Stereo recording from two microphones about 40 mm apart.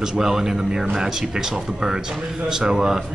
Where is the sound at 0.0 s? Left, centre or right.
Centre.